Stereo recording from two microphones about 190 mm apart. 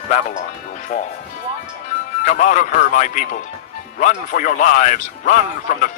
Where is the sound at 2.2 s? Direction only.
40° left (ahead or behind).